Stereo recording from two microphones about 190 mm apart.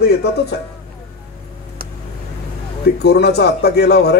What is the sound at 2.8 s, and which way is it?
A man's voice, 60° left (ahead or behind).